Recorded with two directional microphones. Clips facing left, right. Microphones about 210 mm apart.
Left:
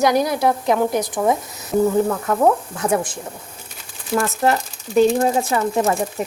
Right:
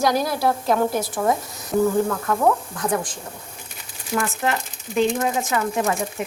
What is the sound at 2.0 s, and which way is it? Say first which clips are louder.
Speech: left 3 dB; 25° left (ahead or behind).